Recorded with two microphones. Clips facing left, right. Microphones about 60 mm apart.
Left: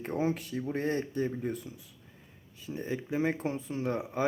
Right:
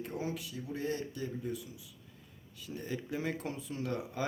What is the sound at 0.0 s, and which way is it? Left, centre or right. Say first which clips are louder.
Speech: left 7 dB; left.